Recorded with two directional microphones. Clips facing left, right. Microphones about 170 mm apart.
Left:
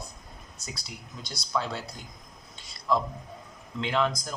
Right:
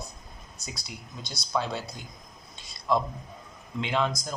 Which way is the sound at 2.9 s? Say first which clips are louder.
Right 1 dB; 20° right (ahead or behind).